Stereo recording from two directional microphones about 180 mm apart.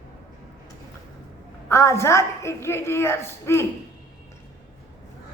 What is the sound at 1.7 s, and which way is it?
A woman's voice, 15° left (ahead or behind).